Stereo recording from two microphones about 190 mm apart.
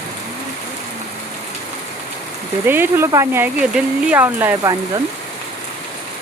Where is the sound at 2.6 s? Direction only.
10° right (ahead or behind).